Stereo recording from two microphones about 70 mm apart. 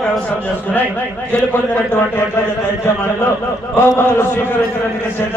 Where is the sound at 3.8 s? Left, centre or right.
Left.